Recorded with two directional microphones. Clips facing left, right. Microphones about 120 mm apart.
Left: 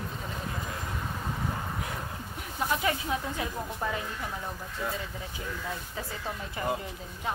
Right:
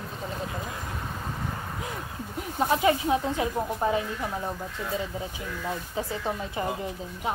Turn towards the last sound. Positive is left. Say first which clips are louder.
# right 2 dB
turn(degrees=-25)  # may be behind; listen again after turning